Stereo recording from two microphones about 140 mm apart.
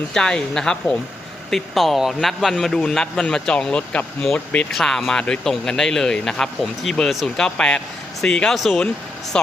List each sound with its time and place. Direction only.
0.1 s a man's voice: 5° left (ahead or behind)